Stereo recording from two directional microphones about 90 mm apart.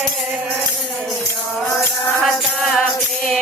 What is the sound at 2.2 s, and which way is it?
Music, 5° left (ahead or behind).